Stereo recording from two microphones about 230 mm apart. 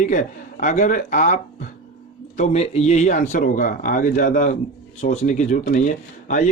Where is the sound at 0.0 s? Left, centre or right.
Left.